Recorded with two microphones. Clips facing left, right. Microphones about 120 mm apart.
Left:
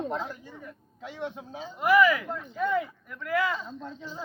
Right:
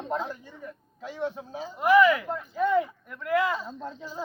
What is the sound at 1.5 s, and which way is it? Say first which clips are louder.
Speech: right 2 dB; 5° right (ahead or behind).